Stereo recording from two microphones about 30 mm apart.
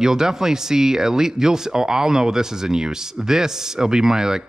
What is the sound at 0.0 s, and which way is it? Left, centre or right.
Speech, centre.